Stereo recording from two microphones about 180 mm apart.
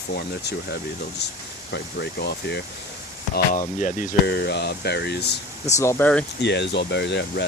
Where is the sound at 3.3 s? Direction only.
45° left (ahead or behind).